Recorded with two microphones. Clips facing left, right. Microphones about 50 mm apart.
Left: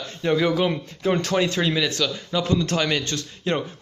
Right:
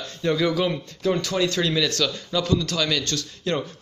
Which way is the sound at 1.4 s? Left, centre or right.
Left.